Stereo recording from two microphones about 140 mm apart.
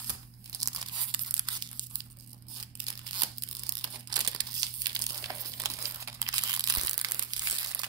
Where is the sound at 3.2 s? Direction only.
30° right (ahead or behind).